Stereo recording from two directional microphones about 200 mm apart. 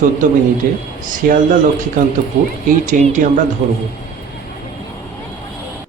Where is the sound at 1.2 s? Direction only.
45° right (ahead or behind).